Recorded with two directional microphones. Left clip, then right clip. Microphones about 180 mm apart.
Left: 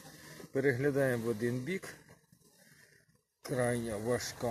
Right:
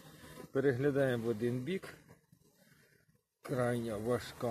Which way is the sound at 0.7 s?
5° left (ahead or behind).